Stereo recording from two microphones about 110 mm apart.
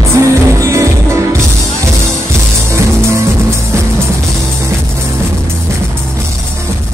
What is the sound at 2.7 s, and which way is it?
Music, 25° right (ahead or behind).